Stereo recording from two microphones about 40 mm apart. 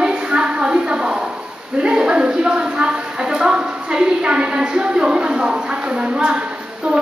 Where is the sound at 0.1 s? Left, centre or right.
Right.